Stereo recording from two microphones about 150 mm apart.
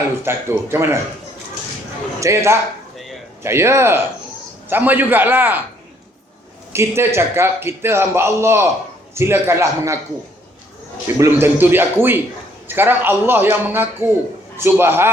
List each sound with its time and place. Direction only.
0.2 s a man's voice: 15° right (ahead or behind)
2.2 s a man's voice: 20° right (ahead or behind)
6.7 s a man's voice: 15° right (ahead or behind)
11.0 s a man's voice: 15° right (ahead or behind)